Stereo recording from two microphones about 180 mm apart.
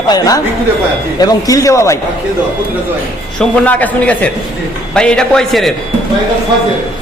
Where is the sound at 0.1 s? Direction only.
20° left (ahead or behind).